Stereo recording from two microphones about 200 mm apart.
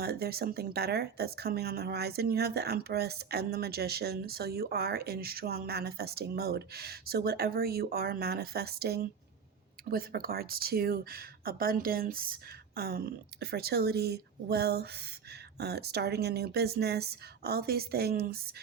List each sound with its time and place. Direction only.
0.0 s speech: 50° right (ahead or behind)